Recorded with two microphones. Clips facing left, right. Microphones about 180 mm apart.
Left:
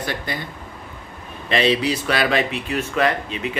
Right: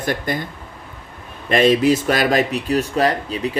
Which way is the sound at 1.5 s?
50° right (ahead or behind).